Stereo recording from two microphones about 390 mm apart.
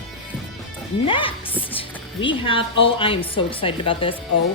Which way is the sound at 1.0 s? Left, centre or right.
Centre.